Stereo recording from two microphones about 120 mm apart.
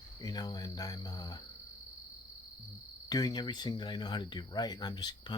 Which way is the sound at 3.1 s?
35° left (ahead or behind).